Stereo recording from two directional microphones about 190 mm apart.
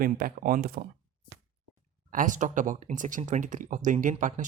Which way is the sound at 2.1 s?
45° right (ahead or behind).